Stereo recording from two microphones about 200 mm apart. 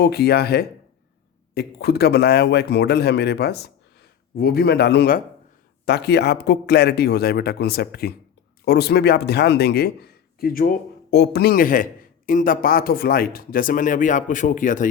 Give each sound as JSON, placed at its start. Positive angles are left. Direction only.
{"t": 0.0, "sound": "a man's voice", "side_deg": 55}